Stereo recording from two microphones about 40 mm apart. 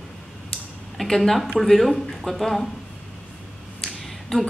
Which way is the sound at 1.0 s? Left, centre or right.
Centre.